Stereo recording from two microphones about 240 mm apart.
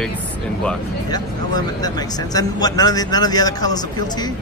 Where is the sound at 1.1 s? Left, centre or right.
Centre.